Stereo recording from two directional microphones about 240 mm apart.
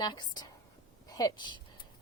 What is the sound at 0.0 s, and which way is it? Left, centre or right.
Speech, centre.